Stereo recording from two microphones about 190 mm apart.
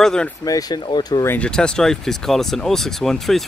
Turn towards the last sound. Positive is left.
turn(degrees=0)  # may be behind; listen again after turning